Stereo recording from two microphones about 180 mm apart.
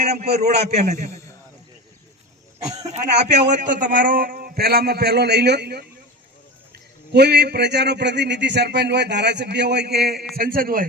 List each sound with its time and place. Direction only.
0.0 s a sound: 40° right (ahead or behind)
0.3 s a man's voice: 40° right (ahead or behind)
2.9 s a man's voice: 40° right (ahead or behind)